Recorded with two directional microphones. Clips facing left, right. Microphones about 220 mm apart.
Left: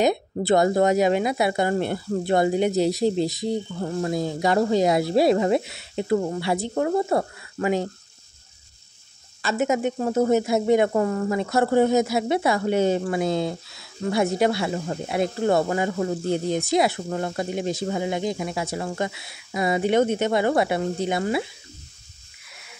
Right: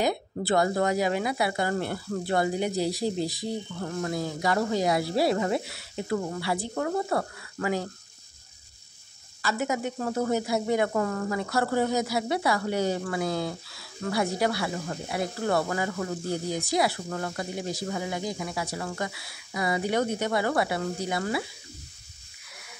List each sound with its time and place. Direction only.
0.0 s speech: 20° left (ahead or behind)
9.4 s speech: 25° left (ahead or behind)